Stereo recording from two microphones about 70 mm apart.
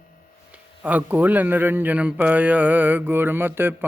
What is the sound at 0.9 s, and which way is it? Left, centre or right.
A man's voice, right.